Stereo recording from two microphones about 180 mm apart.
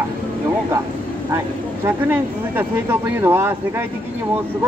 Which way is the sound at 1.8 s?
10° right (ahead or behind).